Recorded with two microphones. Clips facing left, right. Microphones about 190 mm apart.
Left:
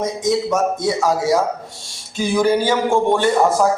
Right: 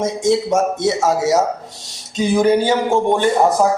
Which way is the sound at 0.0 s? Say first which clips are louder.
Right 2 dB; 25° right (ahead or behind).